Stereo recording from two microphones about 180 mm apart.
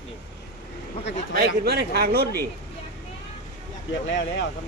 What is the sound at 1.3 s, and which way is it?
A man's voice, 60° right (ahead or behind).